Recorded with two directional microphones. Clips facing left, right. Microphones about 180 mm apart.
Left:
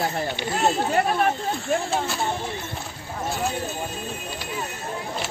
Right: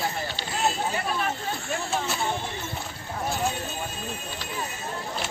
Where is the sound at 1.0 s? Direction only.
55° left (ahead or behind).